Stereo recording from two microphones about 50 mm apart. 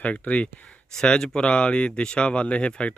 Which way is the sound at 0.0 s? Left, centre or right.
Left.